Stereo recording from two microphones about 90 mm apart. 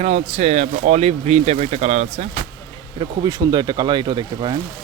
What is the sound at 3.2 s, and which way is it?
Speech, 50° right (ahead or behind).